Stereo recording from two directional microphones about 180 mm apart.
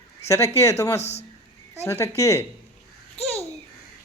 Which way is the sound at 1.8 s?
15° left (ahead or behind).